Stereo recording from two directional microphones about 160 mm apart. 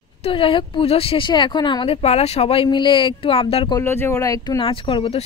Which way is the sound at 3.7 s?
15° left (ahead or behind).